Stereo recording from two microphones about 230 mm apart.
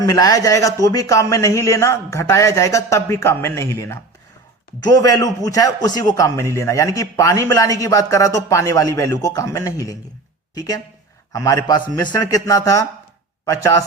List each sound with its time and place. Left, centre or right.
0.0 s speech: centre